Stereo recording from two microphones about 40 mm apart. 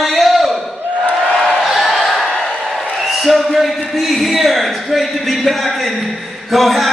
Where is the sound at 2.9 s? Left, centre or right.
Centre.